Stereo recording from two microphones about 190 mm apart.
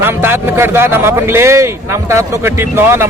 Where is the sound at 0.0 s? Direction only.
10° right (ahead or behind).